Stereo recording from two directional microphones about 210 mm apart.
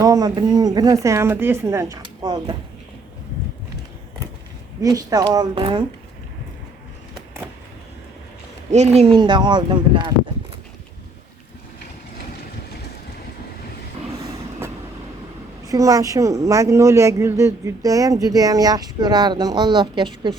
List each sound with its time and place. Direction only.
0.0 s speech: 15° right (ahead or behind)
4.8 s speech: 15° right (ahead or behind)
8.7 s speech: 30° right (ahead or behind)
14.2 s train: 15° right (ahead or behind)
15.6 s speech: 15° right (ahead or behind)